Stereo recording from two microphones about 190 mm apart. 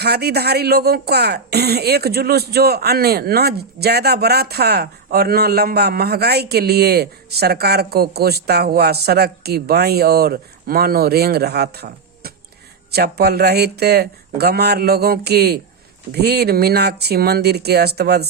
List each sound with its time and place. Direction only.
0.0 s a woman's voice: 55° right (ahead or behind)